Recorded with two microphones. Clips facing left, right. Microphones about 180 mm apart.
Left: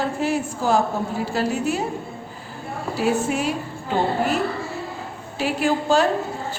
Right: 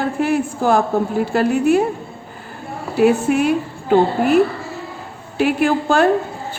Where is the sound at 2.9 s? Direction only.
60° right (ahead or behind).